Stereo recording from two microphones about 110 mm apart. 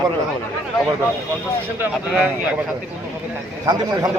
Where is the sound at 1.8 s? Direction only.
15° right (ahead or behind).